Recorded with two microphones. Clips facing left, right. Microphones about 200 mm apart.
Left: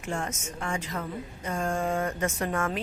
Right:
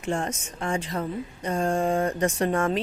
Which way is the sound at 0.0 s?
35° right (ahead or behind).